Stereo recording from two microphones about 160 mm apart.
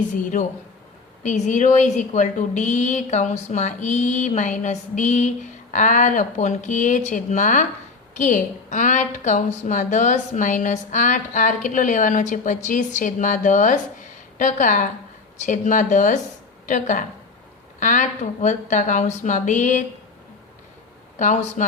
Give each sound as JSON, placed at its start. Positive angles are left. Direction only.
{"t": 0.1, "sound": "a woman's voice", "side_deg": 50}
{"t": 21.2, "sound": "a woman's voice", "side_deg": 50}